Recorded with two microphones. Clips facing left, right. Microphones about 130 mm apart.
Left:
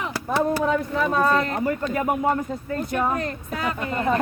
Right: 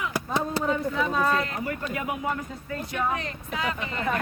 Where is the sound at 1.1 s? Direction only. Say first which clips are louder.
Left 7 dB; 45° left (ahead or behind).